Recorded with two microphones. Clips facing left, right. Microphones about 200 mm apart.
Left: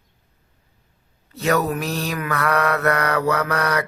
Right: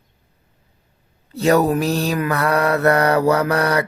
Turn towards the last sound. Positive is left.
turn(degrees=-30)  # may be behind; listen again after turning